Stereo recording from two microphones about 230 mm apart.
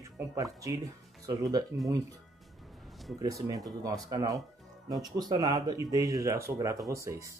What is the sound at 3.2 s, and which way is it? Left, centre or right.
Speech, centre.